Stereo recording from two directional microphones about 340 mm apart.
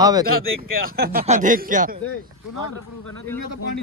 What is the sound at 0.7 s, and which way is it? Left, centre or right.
Speech, right.